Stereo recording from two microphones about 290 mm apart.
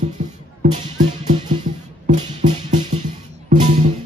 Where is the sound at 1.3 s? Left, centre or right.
Centre.